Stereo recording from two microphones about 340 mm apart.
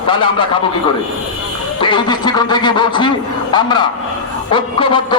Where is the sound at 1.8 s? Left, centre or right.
Centre.